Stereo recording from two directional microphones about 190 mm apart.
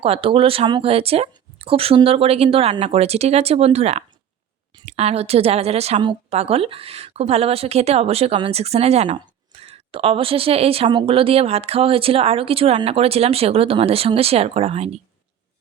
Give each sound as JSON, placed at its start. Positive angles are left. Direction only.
{"t": 0.0, "sound": "a woman's voice", "side_deg": -30}